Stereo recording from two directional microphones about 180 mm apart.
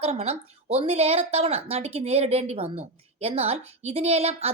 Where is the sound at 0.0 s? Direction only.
35° right (ahead or behind).